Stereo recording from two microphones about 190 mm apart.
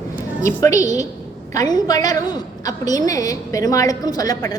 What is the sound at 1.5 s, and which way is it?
A woman's voice, 20° left (ahead or behind).